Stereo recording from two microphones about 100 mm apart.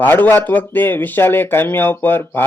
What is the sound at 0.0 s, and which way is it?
A man's voice, 20° left (ahead or behind).